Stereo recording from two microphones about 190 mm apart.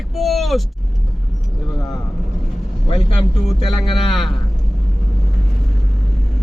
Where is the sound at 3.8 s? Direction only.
30° left (ahead or behind).